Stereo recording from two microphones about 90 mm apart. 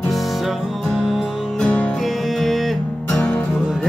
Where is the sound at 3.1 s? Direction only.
15° left (ahead or behind).